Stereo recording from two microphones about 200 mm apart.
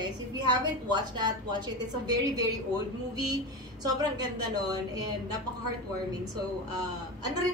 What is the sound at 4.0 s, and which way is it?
Speech, 20° right (ahead or behind).